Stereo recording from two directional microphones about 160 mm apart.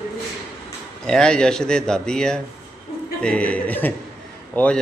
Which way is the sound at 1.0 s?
5° left (ahead or behind).